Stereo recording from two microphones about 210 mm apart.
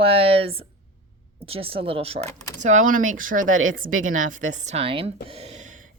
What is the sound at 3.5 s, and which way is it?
Speech, 75° right (ahead or behind).